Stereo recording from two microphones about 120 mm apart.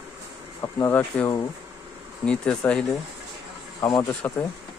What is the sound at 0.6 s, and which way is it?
Speech, 25° left (ahead or behind).